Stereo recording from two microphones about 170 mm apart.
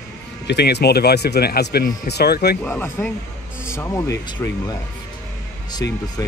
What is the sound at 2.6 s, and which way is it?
Speech, 10° left (ahead or behind).